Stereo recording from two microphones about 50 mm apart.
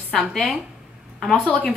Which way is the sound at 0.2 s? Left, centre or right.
Centre.